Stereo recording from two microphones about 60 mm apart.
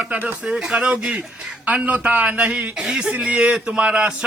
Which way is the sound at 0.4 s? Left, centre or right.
Centre.